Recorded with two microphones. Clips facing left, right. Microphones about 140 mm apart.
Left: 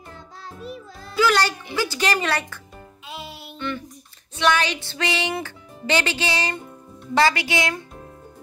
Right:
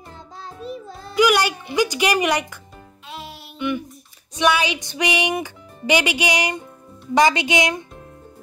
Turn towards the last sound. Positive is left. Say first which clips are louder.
# right 4 dB
turn(degrees=-20)  # may be behind; listen again after turning